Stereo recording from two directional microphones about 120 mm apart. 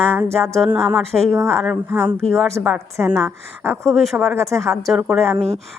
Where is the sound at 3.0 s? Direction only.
20° right (ahead or behind).